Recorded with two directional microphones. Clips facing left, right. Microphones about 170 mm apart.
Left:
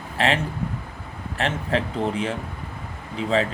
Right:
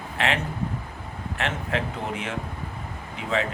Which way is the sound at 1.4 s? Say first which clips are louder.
Left 4 dB; 35° left (ahead or behind).